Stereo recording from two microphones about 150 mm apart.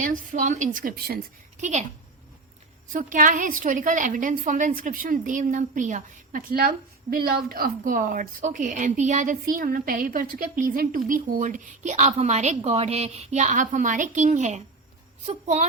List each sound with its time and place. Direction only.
0.0 s a woman's voice: 60° right (ahead or behind); by 1.2 s 80° right
2.9 s a woman's voice: 60° right (ahead or behind)